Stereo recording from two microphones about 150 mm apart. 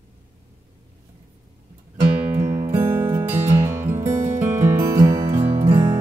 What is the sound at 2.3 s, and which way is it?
Music, 15° right (ahead or behind).